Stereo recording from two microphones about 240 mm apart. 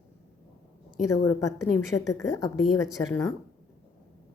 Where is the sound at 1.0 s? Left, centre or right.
Left.